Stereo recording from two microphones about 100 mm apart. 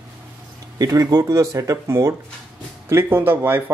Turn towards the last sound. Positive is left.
turn(degrees=-25)  # may be behind; listen again after turning